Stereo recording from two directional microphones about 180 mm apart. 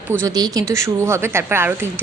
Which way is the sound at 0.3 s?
20° right (ahead or behind).